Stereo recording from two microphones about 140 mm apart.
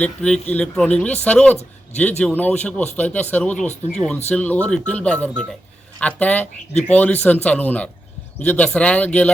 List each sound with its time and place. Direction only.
0.0 s speech: 10° left (ahead or behind)